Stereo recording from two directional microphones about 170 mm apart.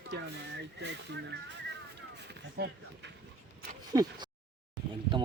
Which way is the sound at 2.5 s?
75° right (ahead or behind).